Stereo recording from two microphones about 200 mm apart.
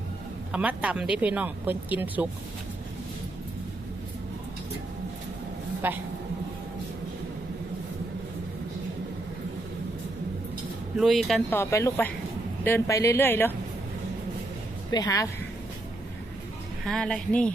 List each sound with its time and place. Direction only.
0.5 s speech: 5° right (ahead or behind)
5.8 s speech: 10° right (ahead or behind)
10.9 s speech: centre (ahead or behind)
11.6 s a woman's voice: 15° left (ahead or behind)
14.8 s speech: 20° left (ahead or behind)
16.8 s speech: 5° left (ahead or behind)